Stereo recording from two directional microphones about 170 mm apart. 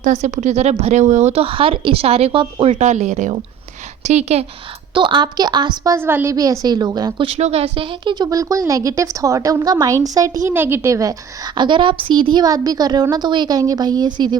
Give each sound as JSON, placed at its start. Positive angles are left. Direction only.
{"t": 0.0, "sound": "speech", "side_deg": -45}
{"t": 4.9, "sound": "a woman's voice", "side_deg": -30}